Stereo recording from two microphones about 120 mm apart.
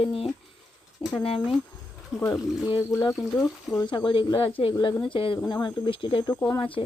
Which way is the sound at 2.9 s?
30° left (ahead or behind).